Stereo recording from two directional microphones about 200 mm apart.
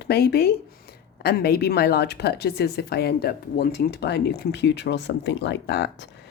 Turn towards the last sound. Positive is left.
turn(degrees=60)  # may be behind; listen again after turning